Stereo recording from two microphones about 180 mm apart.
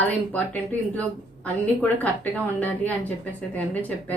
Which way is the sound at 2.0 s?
10° left (ahead or behind).